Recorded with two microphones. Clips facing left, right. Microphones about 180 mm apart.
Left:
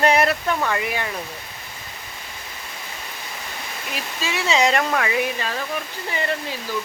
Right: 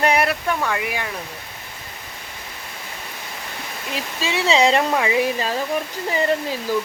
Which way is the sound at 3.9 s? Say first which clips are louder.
Right 3 dB; 30° right (ahead or behind).